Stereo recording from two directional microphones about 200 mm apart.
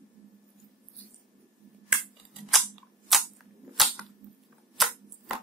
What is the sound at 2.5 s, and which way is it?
Cap gun, centre (ahead or behind).